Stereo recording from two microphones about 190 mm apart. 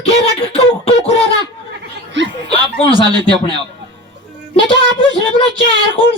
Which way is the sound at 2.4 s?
30° left (ahead or behind).